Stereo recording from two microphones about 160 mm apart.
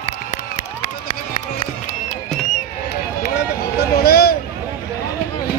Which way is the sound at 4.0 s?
75° left (ahead or behind).